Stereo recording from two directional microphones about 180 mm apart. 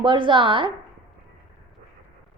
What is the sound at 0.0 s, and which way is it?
Speech, 25° right (ahead or behind).